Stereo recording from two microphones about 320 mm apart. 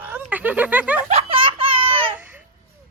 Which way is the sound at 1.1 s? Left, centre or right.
Centre.